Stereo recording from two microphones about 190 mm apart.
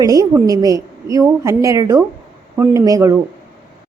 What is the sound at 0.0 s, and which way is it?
A woman's voice, 20° right (ahead or behind).